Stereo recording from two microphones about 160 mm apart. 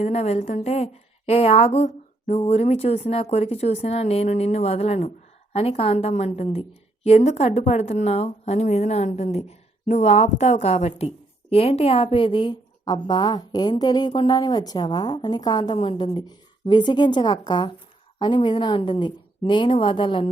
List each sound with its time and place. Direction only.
0.0 s a woman's voice: 45° left (ahead or behind)